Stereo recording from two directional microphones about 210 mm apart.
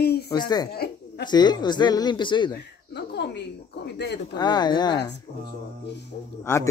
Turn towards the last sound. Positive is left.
turn(degrees=10)  # may be behind; listen again after turning